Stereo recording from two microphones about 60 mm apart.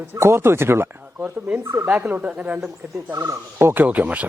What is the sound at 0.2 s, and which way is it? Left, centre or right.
Speech, right.